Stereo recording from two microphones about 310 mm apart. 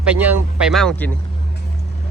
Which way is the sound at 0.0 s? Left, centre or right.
Centre.